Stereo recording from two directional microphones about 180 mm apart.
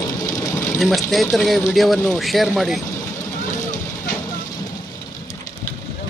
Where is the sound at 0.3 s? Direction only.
20° left (ahead or behind).